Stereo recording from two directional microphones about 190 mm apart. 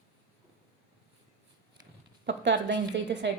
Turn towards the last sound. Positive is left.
turn(degrees=-65)  # may be behind; listen again after turning